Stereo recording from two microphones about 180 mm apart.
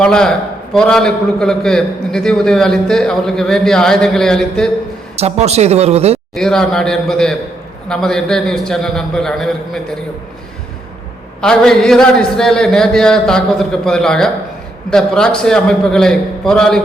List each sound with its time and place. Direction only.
0.0 s a man's voice: 5° left (ahead or behind)
5.1 s speech: 35° right (ahead or behind)
6.3 s a man's voice: 5° left (ahead or behind)
11.3 s a man's voice: 5° left (ahead or behind)